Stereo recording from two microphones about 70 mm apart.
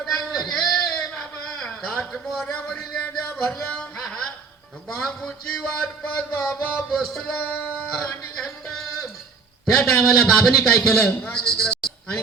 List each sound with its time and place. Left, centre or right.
0.0 s a sound: centre
2.6 s a man's voice: centre
3.0 s music: left
3.9 s music: centre
4.9 s a man's voice: centre
7.4 s a sound: left
7.9 s music: centre
9.7 s a man's voice: centre
11.3 s a sound: centre